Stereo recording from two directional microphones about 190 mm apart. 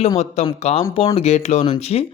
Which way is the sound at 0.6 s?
35° left (ahead or behind).